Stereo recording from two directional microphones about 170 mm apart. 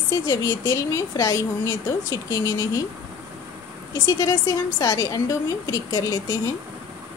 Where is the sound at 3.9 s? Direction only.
20° left (ahead or behind).